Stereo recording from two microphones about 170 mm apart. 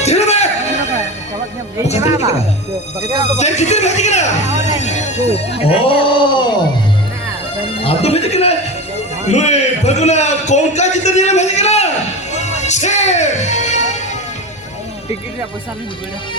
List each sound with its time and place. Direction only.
0.0 s a sound: 40° left (ahead or behind)
2.0 s speech: 20° right (ahead or behind)
3.3 s a man's voice: 40° left (ahead or behind)
7.8 s a man's voice: 35° left (ahead or behind)
12.3 s music: 40° left (ahead or behind)